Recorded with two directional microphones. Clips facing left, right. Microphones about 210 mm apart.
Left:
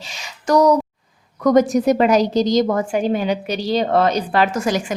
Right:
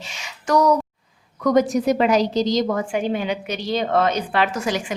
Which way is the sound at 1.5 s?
45° left (ahead or behind).